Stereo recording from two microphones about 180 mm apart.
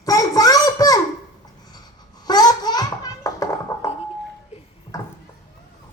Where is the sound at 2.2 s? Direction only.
20° left (ahead or behind).